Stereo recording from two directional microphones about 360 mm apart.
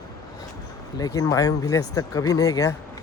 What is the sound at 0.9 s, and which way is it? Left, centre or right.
Speech, centre.